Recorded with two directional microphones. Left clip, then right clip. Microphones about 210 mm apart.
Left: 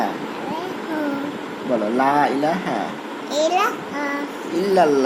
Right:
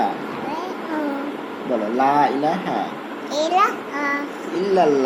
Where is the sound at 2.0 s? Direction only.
30° left (ahead or behind).